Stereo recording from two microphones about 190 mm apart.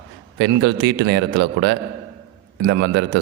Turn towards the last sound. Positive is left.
turn(degrees=-65)  # may be behind; listen again after turning